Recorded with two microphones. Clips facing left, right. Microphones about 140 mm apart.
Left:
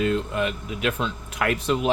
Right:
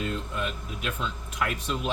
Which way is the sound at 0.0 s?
90° left.